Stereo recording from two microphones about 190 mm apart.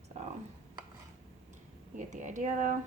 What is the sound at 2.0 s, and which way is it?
Speech, 40° right (ahead or behind).